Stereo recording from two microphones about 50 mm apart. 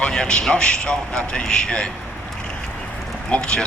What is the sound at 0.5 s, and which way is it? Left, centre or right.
A man's voice, centre.